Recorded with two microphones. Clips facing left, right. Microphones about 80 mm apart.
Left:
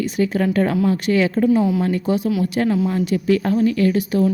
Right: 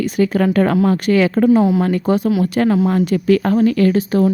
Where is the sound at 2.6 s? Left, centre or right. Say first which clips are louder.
Right 4 dB; right.